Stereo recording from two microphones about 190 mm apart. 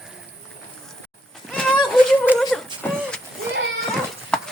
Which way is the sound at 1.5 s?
5° left (ahead or behind).